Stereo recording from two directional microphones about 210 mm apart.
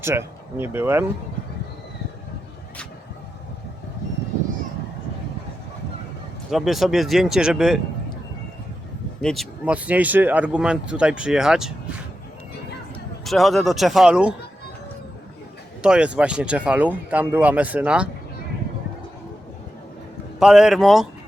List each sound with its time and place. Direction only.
0.0 s speech: 10° right (ahead or behind)
6.5 s speech: centre (ahead or behind)
9.2 s speech: centre (ahead or behind)
13.2 s speech: centre (ahead or behind)
15.8 s speech: 5° right (ahead or behind)
20.4 s speech: centre (ahead or behind)